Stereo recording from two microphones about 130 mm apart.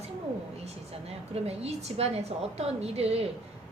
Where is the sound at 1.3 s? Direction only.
50° right (ahead or behind).